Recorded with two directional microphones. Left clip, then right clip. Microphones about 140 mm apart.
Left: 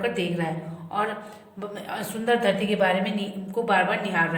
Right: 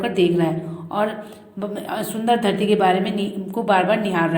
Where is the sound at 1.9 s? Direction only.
25° right (ahead or behind).